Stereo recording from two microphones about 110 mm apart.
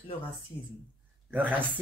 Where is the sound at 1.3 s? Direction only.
15° right (ahead or behind).